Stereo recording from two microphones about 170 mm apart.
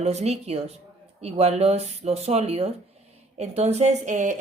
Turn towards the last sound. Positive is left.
turn(degrees=-45)  # may be behind; listen again after turning